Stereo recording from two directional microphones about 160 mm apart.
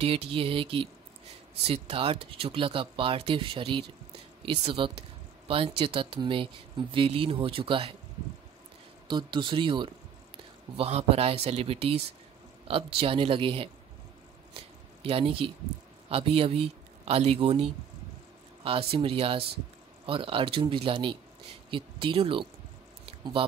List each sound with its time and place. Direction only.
0.0 s speech: 35° right (ahead or behind)
9.0 s speech: 30° right (ahead or behind)
15.0 s a man's voice: 35° right (ahead or behind)